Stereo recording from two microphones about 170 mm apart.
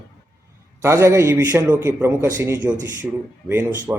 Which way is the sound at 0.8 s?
15° right (ahead or behind).